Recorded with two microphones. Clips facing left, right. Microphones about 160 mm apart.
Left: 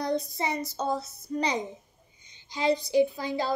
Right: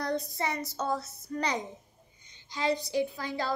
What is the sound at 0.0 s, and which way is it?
A child's voice, 15° left (ahead or behind).